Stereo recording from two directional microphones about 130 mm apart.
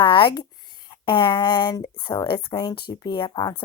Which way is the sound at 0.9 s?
40° left (ahead or behind).